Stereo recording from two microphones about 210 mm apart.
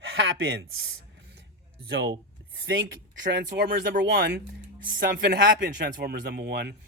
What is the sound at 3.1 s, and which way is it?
Speech, 60° right (ahead or behind).